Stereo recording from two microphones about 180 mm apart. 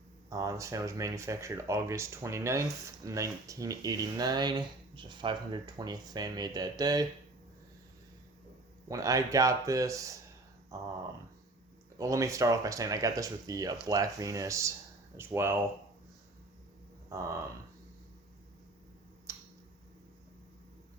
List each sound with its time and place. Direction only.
0.3 s speech: 20° right (ahead or behind)
8.9 s speech: 20° right (ahead or behind)
11.9 s speech: 20° right (ahead or behind)
17.1 s a sound: 15° right (ahead or behind)
19.3 s tick-tock: 15° right (ahead or behind)